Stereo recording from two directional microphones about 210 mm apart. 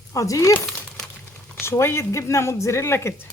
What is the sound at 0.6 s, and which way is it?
Crumpling, centre (ahead or behind).